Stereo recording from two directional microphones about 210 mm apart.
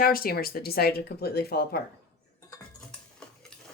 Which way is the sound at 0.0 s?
45° left (ahead or behind).